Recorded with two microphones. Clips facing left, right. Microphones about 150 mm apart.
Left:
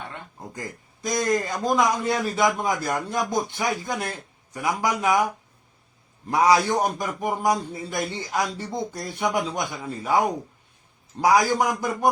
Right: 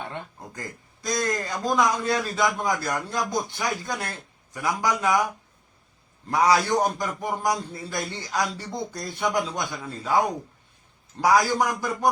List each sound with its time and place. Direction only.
1.0 s a man's voice: 15° left (ahead or behind)
6.3 s a man's voice: 20° left (ahead or behind)
11.2 s a man's voice: 20° left (ahead or behind)